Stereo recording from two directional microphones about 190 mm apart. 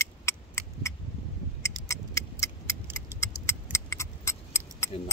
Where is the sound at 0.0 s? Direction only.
15° left (ahead or behind).